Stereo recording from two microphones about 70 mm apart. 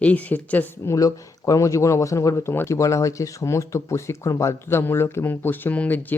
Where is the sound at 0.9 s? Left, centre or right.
Left.